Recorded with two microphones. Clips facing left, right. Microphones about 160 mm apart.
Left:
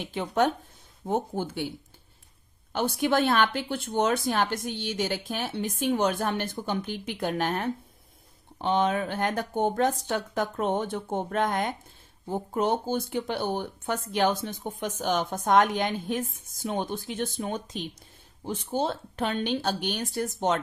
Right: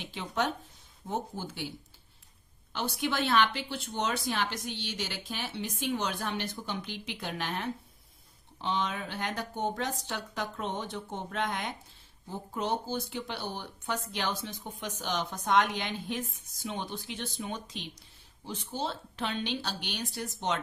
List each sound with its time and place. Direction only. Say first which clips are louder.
0.0 s speech: left 7 dB; 50° left (ahead or behind)
2.7 s speech: left 7 dB; 50° left (ahead or behind)